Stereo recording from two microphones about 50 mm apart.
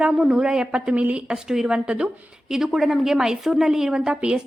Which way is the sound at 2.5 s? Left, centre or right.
Centre.